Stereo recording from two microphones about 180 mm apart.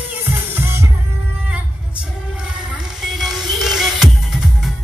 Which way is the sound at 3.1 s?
Centre (ahead or behind).